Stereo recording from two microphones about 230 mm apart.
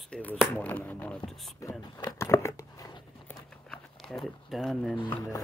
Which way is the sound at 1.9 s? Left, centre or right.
Centre.